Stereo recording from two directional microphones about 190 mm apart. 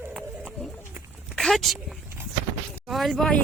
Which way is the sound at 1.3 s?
Centre (ahead or behind).